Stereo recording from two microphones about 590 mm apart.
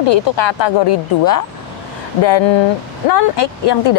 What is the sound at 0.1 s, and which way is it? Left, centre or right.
Speech, left.